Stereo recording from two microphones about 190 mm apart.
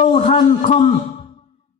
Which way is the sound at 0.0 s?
40° left (ahead or behind).